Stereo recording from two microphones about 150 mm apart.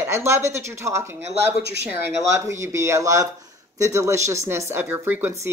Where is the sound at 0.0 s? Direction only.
15° right (ahead or behind).